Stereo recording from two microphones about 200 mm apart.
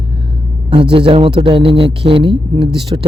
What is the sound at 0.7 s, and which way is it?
A man's voice, 25° right (ahead or behind).